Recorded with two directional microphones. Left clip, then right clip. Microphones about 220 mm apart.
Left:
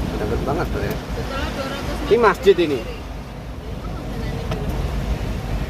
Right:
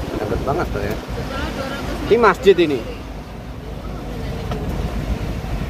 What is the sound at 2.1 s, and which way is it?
Speech, 10° right (ahead or behind).